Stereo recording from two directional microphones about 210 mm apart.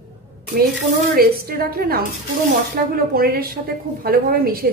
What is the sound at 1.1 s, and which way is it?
A woman's voice, 45° right (ahead or behind).